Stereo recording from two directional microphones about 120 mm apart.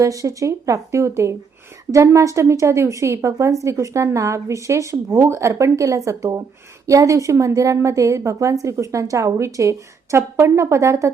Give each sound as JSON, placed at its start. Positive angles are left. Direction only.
{"t": 0.0, "sound": "a woman's voice", "side_deg": -30}